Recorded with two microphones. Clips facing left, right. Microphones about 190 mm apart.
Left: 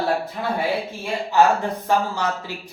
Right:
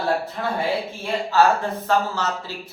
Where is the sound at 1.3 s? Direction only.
15° left (ahead or behind).